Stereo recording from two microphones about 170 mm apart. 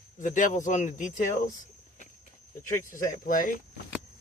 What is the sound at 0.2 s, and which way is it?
Speech, 50° left (ahead or behind).